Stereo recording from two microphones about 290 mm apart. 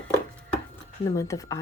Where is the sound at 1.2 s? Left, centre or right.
Centre.